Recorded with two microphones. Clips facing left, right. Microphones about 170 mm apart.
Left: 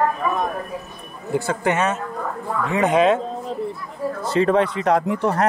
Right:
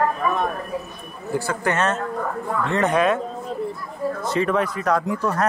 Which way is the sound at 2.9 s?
20° left (ahead or behind).